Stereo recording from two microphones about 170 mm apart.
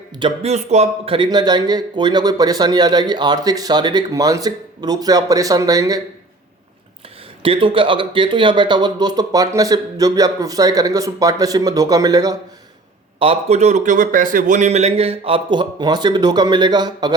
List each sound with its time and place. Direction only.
0.2 s speech: 35° right (ahead or behind)
7.4 s speech: 30° right (ahead or behind)
13.1 s a man's voice: 35° right (ahead or behind)